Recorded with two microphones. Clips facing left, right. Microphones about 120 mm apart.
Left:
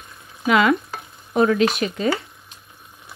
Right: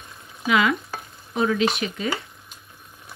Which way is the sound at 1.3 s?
55° left (ahead or behind).